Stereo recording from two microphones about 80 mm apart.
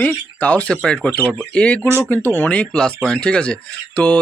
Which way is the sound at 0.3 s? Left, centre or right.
Centre.